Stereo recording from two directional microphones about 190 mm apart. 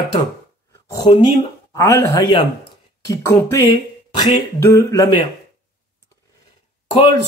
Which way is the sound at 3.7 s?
25° left (ahead or behind).